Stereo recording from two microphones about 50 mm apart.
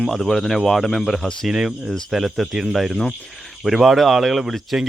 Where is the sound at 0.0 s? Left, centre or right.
Centre.